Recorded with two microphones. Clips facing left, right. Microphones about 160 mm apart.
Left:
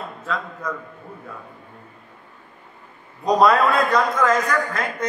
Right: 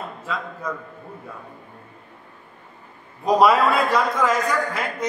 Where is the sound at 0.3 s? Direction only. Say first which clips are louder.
Left 1 dB; 10° right (ahead or behind).